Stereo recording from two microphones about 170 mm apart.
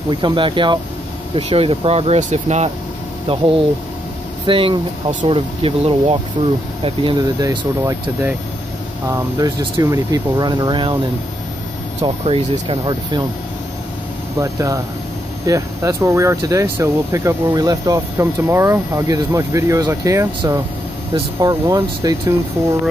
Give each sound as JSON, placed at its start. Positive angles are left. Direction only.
{"t": 0.1, "sound": "speech", "side_deg": -30}
{"t": 4.5, "sound": "speech", "side_deg": -30}
{"t": 12.0, "sound": "speech", "side_deg": -35}
{"t": 14.4, "sound": "speech", "side_deg": -20}